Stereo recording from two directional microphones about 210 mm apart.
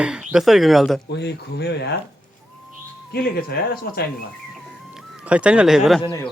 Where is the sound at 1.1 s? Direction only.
55° left (ahead or behind).